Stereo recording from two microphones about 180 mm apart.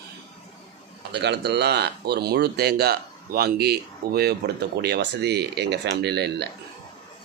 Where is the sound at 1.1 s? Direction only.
70° right (ahead or behind).